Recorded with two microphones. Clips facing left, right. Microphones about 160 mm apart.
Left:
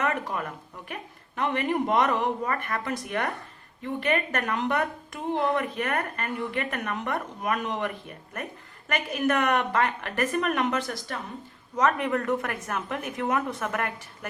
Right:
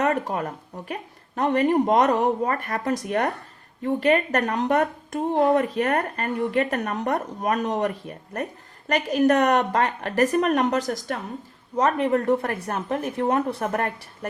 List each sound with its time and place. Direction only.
0.0 s a woman's voice: 40° right (ahead or behind)